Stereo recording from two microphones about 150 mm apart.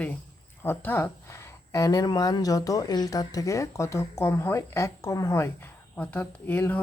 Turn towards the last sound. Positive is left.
turn(degrees=10)  # may be behind; listen again after turning